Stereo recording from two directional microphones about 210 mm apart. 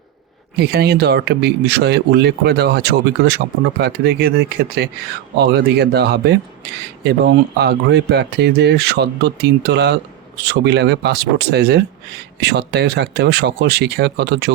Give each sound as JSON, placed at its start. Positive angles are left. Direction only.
{"t": 0.6, "sound": "speech", "side_deg": -50}